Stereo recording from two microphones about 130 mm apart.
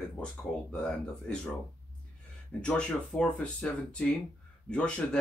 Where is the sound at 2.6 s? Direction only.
10° left (ahead or behind).